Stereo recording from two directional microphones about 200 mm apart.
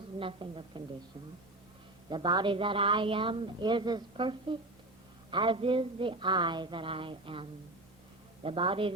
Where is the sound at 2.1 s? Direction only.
20° right (ahead or behind).